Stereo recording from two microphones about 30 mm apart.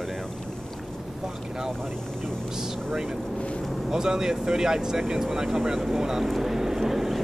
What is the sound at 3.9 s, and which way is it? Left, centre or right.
Speech, right.